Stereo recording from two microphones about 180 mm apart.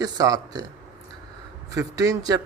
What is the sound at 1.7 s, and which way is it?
Speech, 20° right (ahead or behind).